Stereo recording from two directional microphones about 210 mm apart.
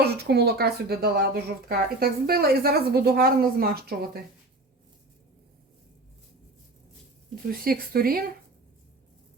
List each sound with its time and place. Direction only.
0.0 s speech: 50° right (ahead or behind)
7.4 s speech: 45° right (ahead or behind)